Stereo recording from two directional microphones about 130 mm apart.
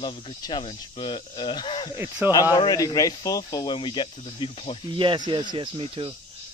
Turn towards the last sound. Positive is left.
turn(degrees=-45)  # may be behind; listen again after turning